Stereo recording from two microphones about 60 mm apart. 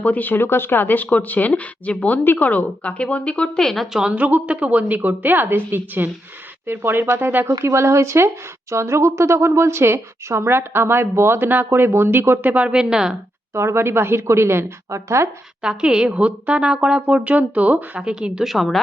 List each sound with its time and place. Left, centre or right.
0.1 s a woman's voice: left; by 3.8 s centre
4.1 s a woman's voice: right
7.6 s speech: right
12.5 s a woman's voice: centre
13.5 s speech: right
15.6 s a woman's voice: centre
18.1 s a woman's voice: centre
18.4 s a woman's voice: centre